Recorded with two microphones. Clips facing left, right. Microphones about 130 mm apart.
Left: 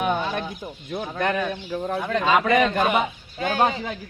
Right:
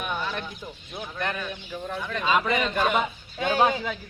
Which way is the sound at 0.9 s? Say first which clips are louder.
Left 7 dB; 70° left (ahead or behind).